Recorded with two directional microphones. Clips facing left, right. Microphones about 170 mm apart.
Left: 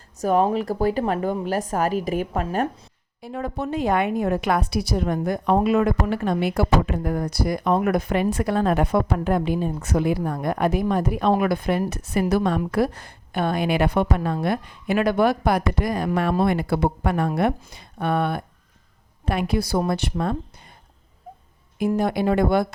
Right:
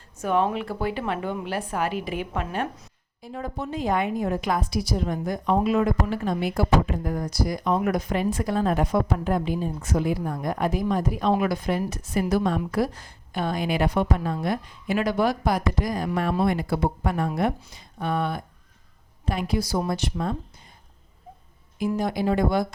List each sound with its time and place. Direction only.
0.2 s a woman's voice: 40° left (ahead or behind)
3.2 s a woman's voice: 65° left (ahead or behind)
21.8 s a woman's voice: 60° left (ahead or behind)